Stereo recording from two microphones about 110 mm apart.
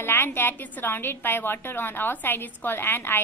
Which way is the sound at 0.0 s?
20° left (ahead or behind).